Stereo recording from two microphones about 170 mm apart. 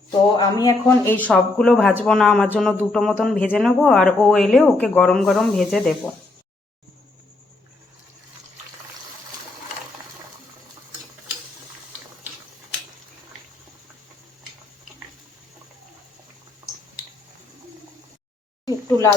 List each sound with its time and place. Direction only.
0.1 s speech: 20° left (ahead or behind); by 6.0 s centre (ahead or behind)